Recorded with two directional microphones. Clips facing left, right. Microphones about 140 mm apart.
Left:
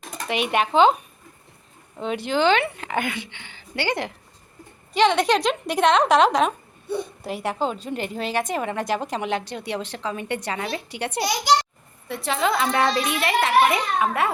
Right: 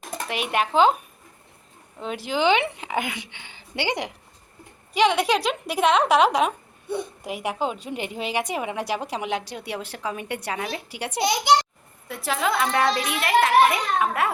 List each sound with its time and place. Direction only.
0.3 s a child's voice: centre (ahead or behind)
2.0 s a woman's voice: centre (ahead or behind)
11.2 s a child's voice: 20° right (ahead or behind)
12.0 s a child's voice: 5° right (ahead or behind)